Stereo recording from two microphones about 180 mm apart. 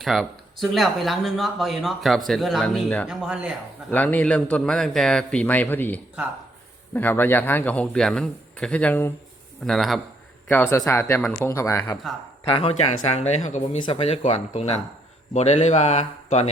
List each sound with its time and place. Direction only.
0.0 s speech: centre (ahead or behind)
3.1 s speech: 5° right (ahead or behind)
3.9 s a man's voice: 10° left (ahead or behind)
10.5 s a man's voice: 15° left (ahead or behind)
11.2 s a man's voice: 5° left (ahead or behind)
12.5 s speech: 35° left (ahead or behind)